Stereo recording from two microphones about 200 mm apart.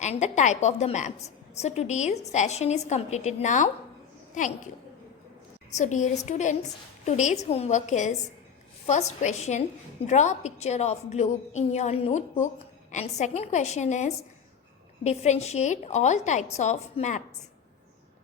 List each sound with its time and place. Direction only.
0.0 s a woman's voice: 35° left (ahead or behind)
5.7 s a woman's voice: 35° left (ahead or behind)